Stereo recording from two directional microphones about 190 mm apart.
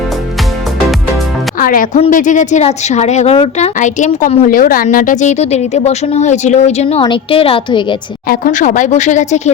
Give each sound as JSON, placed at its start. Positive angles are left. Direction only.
{"t": 1.5, "sound": "a woman's voice", "side_deg": 45}
{"t": 4.4, "sound": "a woman's voice", "side_deg": 45}
{"t": 8.3, "sound": "speech", "side_deg": 45}